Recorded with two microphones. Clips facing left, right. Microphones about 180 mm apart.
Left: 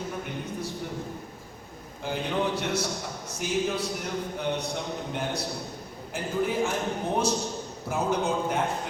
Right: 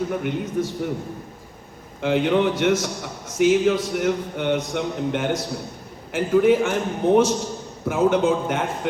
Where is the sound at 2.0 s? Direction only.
90° right.